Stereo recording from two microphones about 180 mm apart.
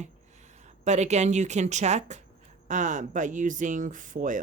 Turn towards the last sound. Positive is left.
turn(degrees=-45)  # may be behind; listen again after turning